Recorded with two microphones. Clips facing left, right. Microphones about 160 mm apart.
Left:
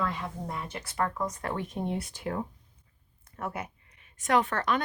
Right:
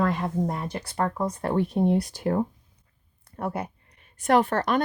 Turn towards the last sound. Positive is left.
turn(degrees=-35)  # may be behind; listen again after turning